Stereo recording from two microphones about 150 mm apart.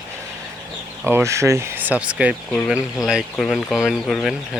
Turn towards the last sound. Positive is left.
turn(degrees=0)  # may be behind; listen again after turning